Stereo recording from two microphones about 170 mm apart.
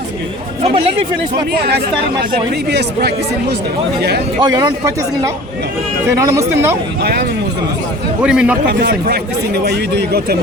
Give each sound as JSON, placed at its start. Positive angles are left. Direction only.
{"t": 0.6, "sound": "speech", "side_deg": -35}
{"t": 2.6, "sound": "speech", "side_deg": -75}
{"t": 4.4, "sound": "speech", "side_deg": -20}
{"t": 6.1, "sound": "speech", "side_deg": -15}
{"t": 7.0, "sound": "speech", "side_deg": -70}
{"t": 8.2, "sound": "a man's voice", "side_deg": -5}
{"t": 8.6, "sound": "speech", "side_deg": -75}